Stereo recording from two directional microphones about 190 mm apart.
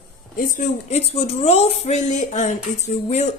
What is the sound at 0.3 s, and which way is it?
A woman's voice, 45° left (ahead or behind).